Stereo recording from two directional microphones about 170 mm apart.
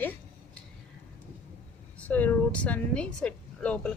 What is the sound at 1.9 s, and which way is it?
A woman's voice, 10° left (ahead or behind).